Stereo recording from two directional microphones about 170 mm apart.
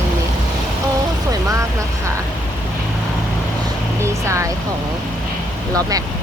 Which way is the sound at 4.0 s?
15° right (ahead or behind).